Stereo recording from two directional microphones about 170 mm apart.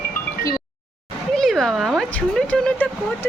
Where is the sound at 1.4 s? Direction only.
Centre (ahead or behind).